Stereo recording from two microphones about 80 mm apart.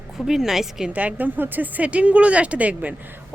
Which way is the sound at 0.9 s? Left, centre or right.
Centre.